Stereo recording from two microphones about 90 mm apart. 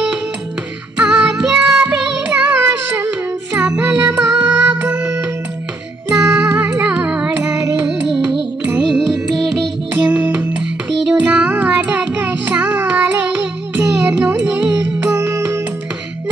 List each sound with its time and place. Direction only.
0.9 s music: 15° right (ahead or behind)
6.1 s music: 25° right (ahead or behind); by 9.7 s centre (ahead or behind)
10.0 s music: 20° right (ahead or behind)
15.1 s music: 30° right (ahead or behind)